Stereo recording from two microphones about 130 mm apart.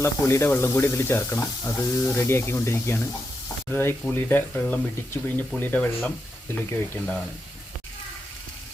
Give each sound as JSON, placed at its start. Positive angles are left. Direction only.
{"t": 0.0, "sound": "speech", "side_deg": 20}